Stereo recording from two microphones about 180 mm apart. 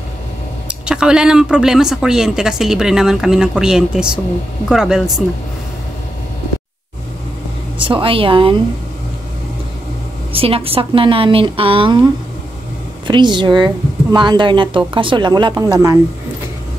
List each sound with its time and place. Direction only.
0.7 s speech: 5° right (ahead or behind)
7.8 s speech: 30° right (ahead or behind)
10.3 s a woman's voice: 30° right (ahead or behind)